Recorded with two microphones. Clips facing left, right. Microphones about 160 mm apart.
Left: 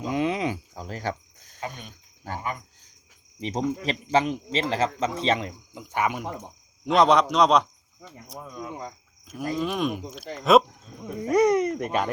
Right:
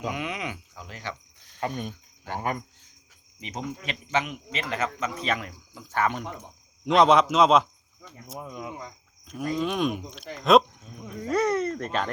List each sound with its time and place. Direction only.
0.1 s cricket: 30° left (ahead or behind)
1.6 s cricket: 45° right (ahead or behind)
3.4 s speech: 30° left (ahead or behind); by 6.2 s 10° left (ahead or behind)
6.8 s a man's voice: centre (ahead or behind)
8.4 s cricket: 15° right (ahead or behind)
9.2 s a sound: 5° left (ahead or behind)
9.6 s a man's voice: centre (ahead or behind)
11.2 s a sound: 15° left (ahead or behind)